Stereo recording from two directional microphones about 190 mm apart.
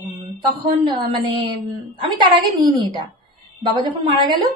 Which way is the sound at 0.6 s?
25° right (ahead or behind).